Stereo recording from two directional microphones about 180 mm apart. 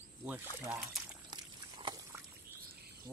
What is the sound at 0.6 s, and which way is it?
Speech, 5° right (ahead or behind).